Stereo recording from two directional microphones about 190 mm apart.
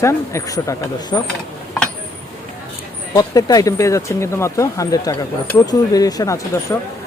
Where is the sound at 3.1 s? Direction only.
20° left (ahead or behind).